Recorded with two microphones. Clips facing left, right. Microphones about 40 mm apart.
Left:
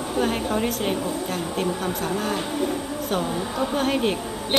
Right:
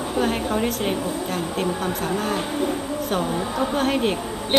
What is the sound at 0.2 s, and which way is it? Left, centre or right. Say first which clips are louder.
Speech: right 1 dB; centre.